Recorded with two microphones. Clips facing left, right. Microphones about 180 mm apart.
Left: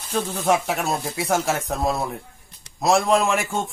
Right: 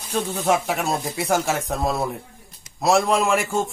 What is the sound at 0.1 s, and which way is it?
A man's voice, centre (ahead or behind).